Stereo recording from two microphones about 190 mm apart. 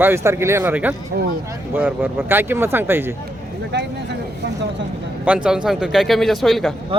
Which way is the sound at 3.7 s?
65° right (ahead or behind).